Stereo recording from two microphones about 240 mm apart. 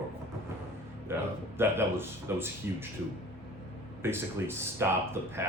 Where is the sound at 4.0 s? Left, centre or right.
Centre.